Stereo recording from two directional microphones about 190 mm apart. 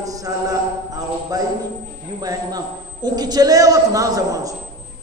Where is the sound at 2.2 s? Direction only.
20° right (ahead or behind).